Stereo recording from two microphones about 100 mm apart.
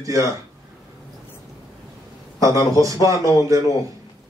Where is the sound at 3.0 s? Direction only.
35° right (ahead or behind).